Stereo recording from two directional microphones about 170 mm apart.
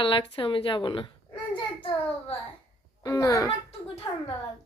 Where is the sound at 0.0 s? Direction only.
30° left (ahead or behind).